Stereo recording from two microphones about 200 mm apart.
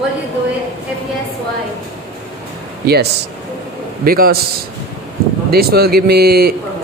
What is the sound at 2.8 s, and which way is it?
Speech, 55° right (ahead or behind).